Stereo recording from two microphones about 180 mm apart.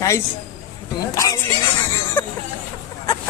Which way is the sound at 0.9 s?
20° left (ahead or behind).